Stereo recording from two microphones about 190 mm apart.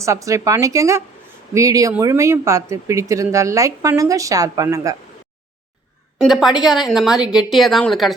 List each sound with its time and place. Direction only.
0.0 s speech: 15° right (ahead or behind)
6.1 s a woman's voice: centre (ahead or behind)